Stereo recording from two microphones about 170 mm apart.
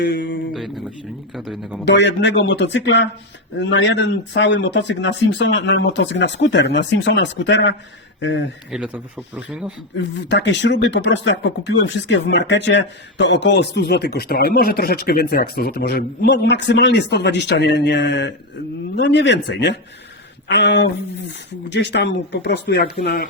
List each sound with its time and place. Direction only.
0.0 s speech: 85° left
0.5 s speech: centre (ahead or behind)
1.8 s speech: 90° left
8.7 s speech: 5° right (ahead or behind)
10.0 s speech: 90° left; by 23.2 s 70° left (ahead or behind)